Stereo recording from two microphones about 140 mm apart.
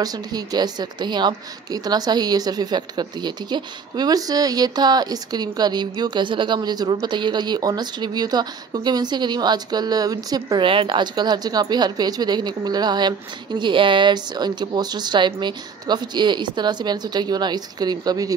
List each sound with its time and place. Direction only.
0.0 s a woman's voice: 25° right (ahead or behind)